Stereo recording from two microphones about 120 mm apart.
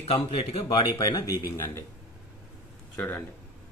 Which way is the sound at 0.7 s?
40° left (ahead or behind).